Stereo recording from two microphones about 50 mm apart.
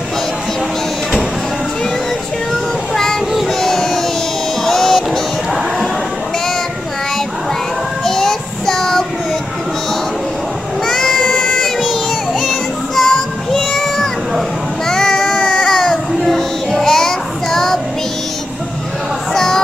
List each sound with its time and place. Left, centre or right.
2.5 s child singing: centre
3.4 s a sound: centre
4.6 s music: centre
8.0 s child singing: centre
10.9 s child singing: centre
14.9 s a sound: centre
15.3 s baby cry: left
15.7 s baby cry: centre
16.3 s music: centre
19.3 s a sound: centre